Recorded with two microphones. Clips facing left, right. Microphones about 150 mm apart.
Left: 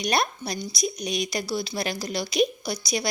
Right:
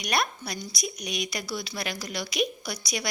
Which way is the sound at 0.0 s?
30° left (ahead or behind).